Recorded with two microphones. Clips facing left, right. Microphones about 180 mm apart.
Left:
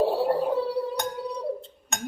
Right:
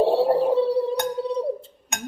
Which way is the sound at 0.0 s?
25° right (ahead or behind).